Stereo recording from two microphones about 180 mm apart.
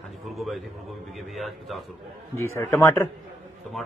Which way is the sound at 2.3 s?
15° left (ahead or behind).